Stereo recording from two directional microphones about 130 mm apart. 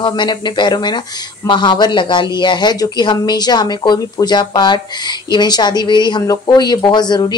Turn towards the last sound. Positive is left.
turn(degrees=35)  # may be behind; listen again after turning